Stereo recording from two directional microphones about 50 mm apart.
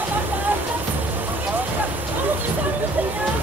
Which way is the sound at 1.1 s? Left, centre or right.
Right.